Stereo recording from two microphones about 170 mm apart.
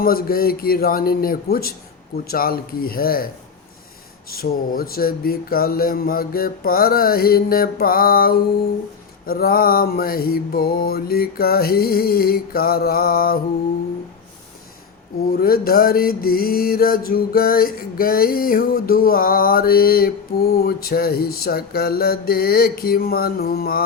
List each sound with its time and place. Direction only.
0.0 s music: 60° left (ahead or behind)
4.3 s music: 60° left (ahead or behind)
15.3 s music: 60° left (ahead or behind)